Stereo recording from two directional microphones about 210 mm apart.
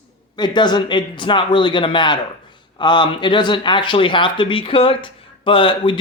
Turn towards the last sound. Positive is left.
turn(degrees=25)  # may be behind; listen again after turning